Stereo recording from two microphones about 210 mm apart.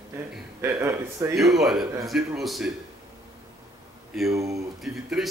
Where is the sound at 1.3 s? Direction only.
Centre (ahead or behind).